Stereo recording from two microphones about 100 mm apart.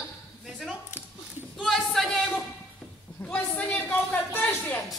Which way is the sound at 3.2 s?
15° left (ahead or behind).